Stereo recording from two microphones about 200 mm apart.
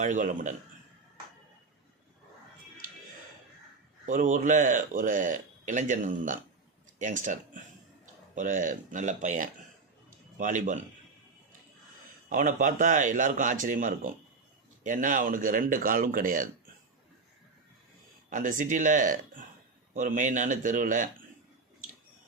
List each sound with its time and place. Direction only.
0.0 s speech: 40° right (ahead or behind)
4.0 s a man's voice: 40° right (ahead or behind)
12.3 s speech: 40° right (ahead or behind)
18.3 s speech: 40° right (ahead or behind)